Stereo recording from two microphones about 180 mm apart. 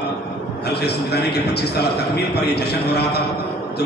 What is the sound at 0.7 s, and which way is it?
A man's voice, 65° left (ahead or behind).